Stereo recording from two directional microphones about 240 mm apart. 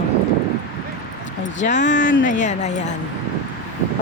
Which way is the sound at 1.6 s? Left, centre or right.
Left.